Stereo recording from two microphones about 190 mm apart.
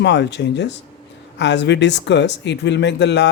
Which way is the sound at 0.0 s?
65° left (ahead or behind).